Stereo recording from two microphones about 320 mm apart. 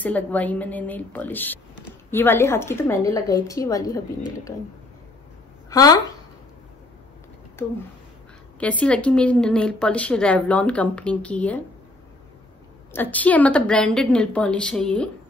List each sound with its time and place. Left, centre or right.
0.0 s speech: centre
5.7 s speech: centre
8.5 s a woman's voice: centre
12.9 s a woman's voice: centre